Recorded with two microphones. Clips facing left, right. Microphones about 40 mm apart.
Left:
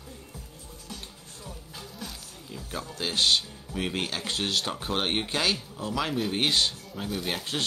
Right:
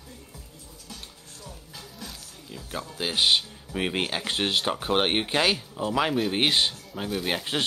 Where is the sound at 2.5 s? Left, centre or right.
Centre.